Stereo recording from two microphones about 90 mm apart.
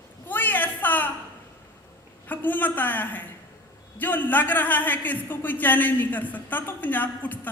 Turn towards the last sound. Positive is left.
turn(degrees=20)  # may be behind; listen again after turning